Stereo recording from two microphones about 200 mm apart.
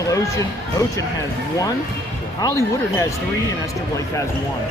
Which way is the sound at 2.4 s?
15° left (ahead or behind).